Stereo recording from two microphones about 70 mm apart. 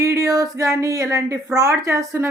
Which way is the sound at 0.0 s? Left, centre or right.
Right.